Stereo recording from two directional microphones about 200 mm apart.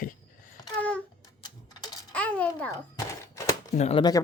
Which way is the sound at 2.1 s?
5° left (ahead or behind).